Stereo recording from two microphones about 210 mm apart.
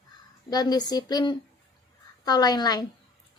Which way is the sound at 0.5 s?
20° left (ahead or behind).